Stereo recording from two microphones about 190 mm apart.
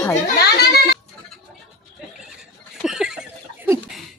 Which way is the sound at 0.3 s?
55° left (ahead or behind).